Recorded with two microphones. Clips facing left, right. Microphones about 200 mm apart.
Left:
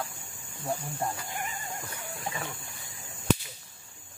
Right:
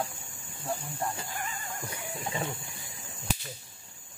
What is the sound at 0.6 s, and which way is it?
Speech, 30° left (ahead or behind).